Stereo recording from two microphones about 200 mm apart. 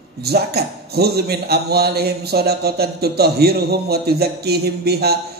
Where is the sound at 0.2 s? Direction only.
50° right (ahead or behind).